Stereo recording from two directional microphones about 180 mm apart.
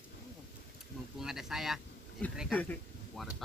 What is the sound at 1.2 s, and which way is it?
Speech, centre (ahead or behind).